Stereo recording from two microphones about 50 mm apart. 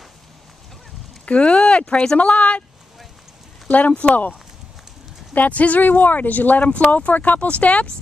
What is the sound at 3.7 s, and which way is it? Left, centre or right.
Speech, left.